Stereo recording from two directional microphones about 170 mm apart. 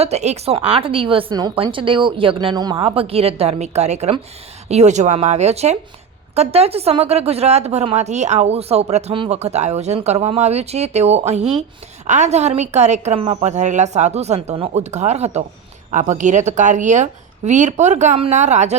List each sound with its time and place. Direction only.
0.0 s a woman's voice: 40° right (ahead or behind)